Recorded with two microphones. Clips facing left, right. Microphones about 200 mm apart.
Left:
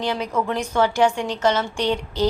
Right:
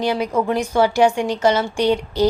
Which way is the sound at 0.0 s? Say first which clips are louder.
Right 4 dB; 10° right (ahead or behind).